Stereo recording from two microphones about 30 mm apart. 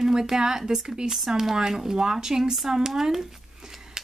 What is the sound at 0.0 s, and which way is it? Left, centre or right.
Speech, centre.